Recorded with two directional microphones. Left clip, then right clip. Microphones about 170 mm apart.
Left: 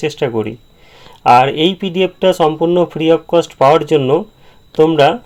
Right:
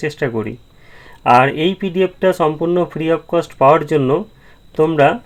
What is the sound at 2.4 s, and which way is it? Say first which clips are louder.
Speech: left 4 dB; 15° left (ahead or behind).